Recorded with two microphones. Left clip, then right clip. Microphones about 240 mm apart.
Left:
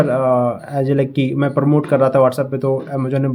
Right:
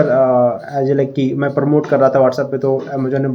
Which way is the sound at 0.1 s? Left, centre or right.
Left.